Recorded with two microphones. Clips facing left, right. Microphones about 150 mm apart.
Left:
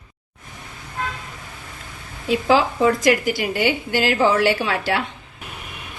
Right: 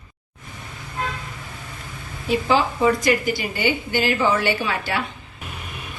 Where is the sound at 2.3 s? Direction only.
90° left.